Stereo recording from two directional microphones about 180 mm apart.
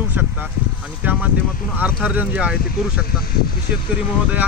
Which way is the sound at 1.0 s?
10° right (ahead or behind).